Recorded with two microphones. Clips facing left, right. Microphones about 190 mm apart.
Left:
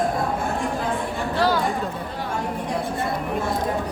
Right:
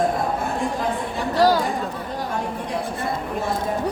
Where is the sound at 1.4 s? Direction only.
40° right (ahead or behind).